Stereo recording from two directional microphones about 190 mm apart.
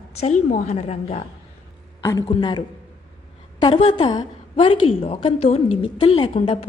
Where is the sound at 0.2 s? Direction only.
35° left (ahead or behind).